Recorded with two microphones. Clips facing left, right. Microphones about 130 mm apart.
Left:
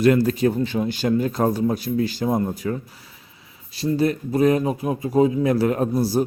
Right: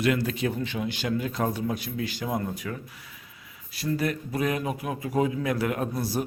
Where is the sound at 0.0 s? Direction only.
40° left (ahead or behind).